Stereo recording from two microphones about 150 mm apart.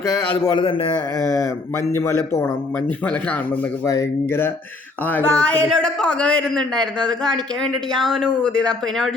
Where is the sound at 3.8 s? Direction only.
20° left (ahead or behind).